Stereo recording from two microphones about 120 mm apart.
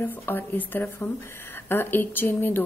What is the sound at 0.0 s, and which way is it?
A woman's voice, 15° left (ahead or behind).